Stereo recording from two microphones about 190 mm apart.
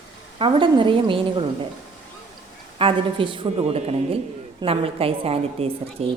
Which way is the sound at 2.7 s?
30° right (ahead or behind).